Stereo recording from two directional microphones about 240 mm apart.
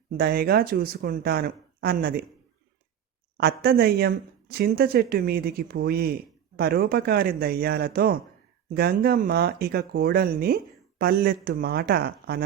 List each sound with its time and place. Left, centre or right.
0.2 s speech: right
3.3 s speech: right